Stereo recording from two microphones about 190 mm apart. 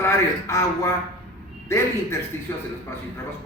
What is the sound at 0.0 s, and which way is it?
A man's voice, 15° left (ahead or behind).